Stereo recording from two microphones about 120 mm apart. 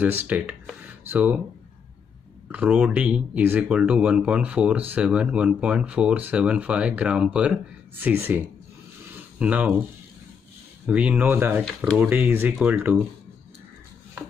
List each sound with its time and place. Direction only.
0.0 s speech: 15° right (ahead or behind)
2.5 s speech: 10° right (ahead or behind)
10.9 s speech: 10° right (ahead or behind)
11.6 s speech: centre (ahead or behind)
12.0 s speech: 20° right (ahead or behind)